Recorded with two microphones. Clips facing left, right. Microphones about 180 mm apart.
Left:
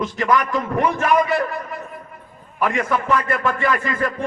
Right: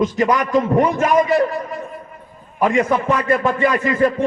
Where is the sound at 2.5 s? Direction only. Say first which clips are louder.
Right 5 dB; 20° right (ahead or behind).